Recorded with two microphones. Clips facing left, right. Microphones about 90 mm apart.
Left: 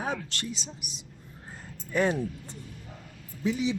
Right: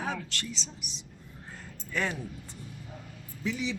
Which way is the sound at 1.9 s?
20° left (ahead or behind).